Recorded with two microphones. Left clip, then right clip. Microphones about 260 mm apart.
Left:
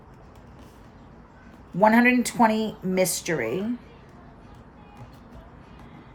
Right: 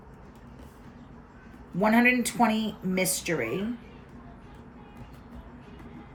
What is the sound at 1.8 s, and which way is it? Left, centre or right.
A woman's voice, left.